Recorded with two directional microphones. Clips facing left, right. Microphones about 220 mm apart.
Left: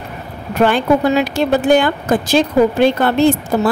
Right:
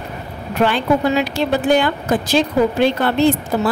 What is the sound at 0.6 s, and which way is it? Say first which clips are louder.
Speech: left 3 dB; 45° left (ahead or behind).